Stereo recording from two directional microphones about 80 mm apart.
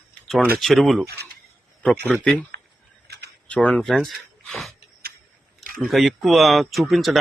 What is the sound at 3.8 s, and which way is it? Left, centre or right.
Speech, centre.